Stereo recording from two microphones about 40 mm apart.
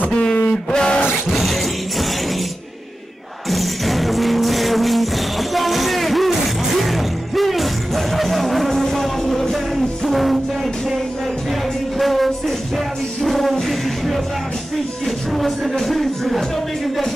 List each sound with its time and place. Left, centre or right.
0.1 s a sound: left
1.3 s music: centre
3.4 s music: centre
12.0 s music: centre